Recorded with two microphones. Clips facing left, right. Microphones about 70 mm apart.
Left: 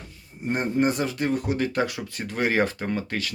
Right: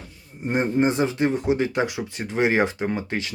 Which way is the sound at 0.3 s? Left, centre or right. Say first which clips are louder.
Right 2 dB; centre.